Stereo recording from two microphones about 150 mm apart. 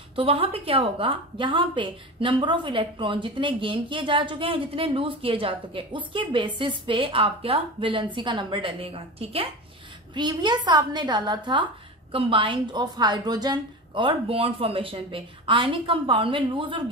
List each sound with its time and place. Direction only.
0.1 s a woman's voice: 35° right (ahead or behind)